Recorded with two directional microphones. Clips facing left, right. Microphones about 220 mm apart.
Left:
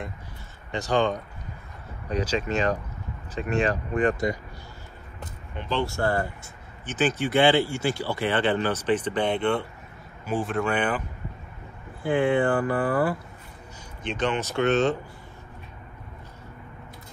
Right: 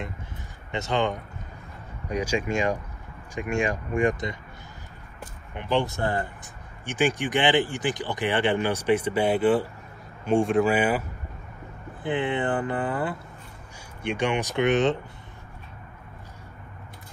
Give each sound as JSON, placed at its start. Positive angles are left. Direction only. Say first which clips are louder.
{"t": 0.7, "sound": "speech", "louder": "left 2 dB", "side_deg": -20}
{"t": 12.0, "sound": "speech", "louder": "left 4 dB", "side_deg": -20}